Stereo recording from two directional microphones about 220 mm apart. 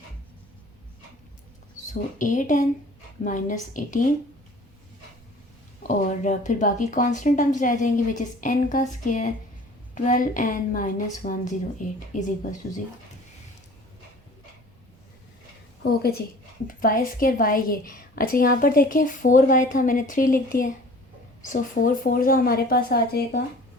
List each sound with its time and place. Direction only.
1.9 s a woman's voice: 35° left (ahead or behind)
5.9 s a woman's voice: 35° left (ahead or behind)
15.8 s a woman's voice: 45° left (ahead or behind)